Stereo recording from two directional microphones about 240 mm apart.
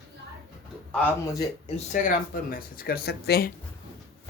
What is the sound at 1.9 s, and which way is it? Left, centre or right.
Speech, left.